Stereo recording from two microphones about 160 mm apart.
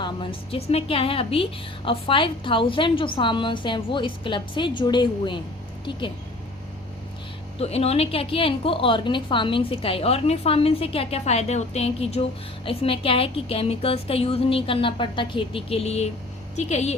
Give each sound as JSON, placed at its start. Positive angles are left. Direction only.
{"t": 0.0, "sound": "a woman's voice", "side_deg": 35}
{"t": 7.6, "sound": "a woman's voice", "side_deg": 40}